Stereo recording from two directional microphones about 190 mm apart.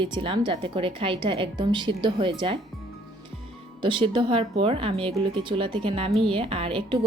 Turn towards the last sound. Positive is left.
turn(degrees=-25)  # may be behind; listen again after turning